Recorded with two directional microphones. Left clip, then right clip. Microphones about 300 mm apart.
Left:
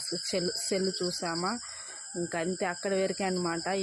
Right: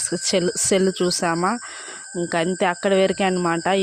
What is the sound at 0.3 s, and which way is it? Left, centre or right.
Speech, right.